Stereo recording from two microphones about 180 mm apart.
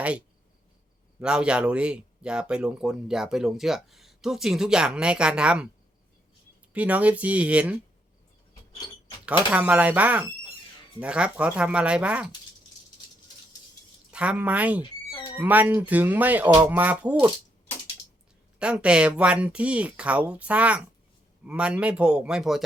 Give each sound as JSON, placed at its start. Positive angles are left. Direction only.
{"t": 1.2, "sound": "speech", "side_deg": -5}
{"t": 6.7, "sound": "speech", "side_deg": -10}
{"t": 9.2, "sound": "speech", "side_deg": -5}
{"t": 14.1, "sound": "speech", "side_deg": -5}
{"t": 16.5, "sound": "speech", "side_deg": -20}
{"t": 16.7, "sound": "speech", "side_deg": -10}
{"t": 18.6, "sound": "speech", "side_deg": -5}